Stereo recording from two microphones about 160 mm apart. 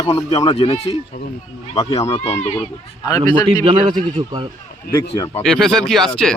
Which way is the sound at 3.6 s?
40° right (ahead or behind).